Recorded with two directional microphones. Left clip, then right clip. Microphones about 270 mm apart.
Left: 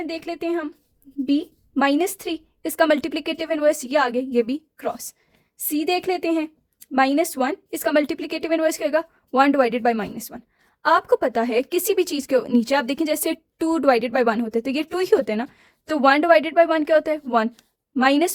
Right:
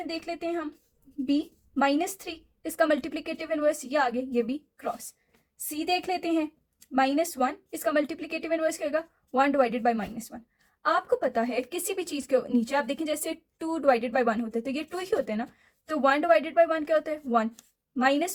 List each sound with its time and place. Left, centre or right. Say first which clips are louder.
0.2 s speech: left 7 dB; left
5.8 s speech: left 5 dB; left